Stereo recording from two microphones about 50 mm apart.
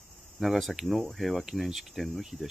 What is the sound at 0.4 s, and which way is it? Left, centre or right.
Speech, centre.